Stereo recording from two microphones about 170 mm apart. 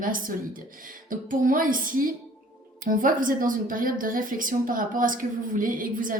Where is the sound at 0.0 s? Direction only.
55° right (ahead or behind).